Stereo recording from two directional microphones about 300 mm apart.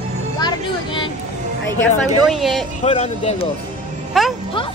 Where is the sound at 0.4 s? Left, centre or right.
Centre.